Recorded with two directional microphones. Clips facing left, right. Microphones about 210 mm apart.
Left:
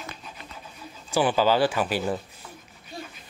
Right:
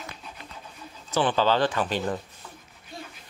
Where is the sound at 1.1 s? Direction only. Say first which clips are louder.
Left 1 dB; 10° left (ahead or behind).